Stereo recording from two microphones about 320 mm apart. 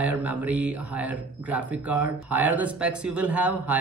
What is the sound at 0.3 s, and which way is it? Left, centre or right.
Speech, centre.